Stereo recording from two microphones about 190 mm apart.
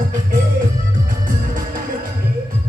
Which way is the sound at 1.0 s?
45° right (ahead or behind).